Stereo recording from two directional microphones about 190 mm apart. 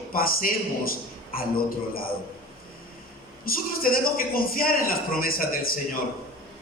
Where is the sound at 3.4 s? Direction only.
50° left (ahead or behind).